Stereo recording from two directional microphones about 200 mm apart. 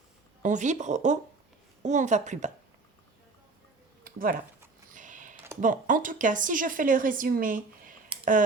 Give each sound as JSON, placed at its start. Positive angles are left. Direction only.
{"t": 0.4, "sound": "speech", "side_deg": -35}
{"t": 4.0, "sound": "a sound", "side_deg": -45}
{"t": 5.5, "sound": "speech", "side_deg": -40}